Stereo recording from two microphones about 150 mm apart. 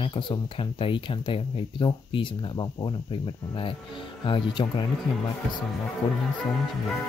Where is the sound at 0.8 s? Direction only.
35° left (ahead or behind).